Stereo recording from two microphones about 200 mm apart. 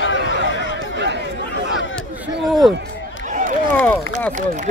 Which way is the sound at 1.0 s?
60° right (ahead or behind).